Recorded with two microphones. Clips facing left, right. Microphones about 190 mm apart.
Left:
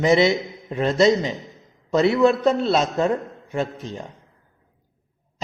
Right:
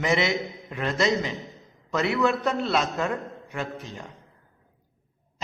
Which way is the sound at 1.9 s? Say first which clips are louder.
Left 7 dB; 35° left (ahead or behind).